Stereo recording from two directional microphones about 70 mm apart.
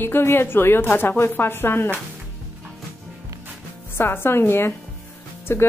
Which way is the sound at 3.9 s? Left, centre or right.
Left.